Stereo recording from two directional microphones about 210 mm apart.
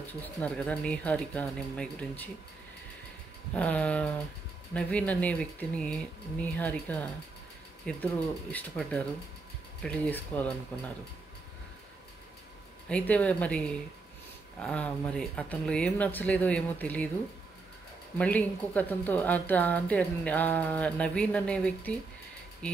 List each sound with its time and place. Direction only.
0.2 s a woman's voice: 5° left (ahead or behind)
3.5 s a woman's voice: 5° left (ahead or behind)
12.8 s speech: 5° left (ahead or behind)
18.1 s a woman's voice: 10° left (ahead or behind)